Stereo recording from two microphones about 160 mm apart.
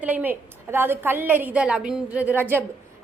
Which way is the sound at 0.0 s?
10° right (ahead or behind).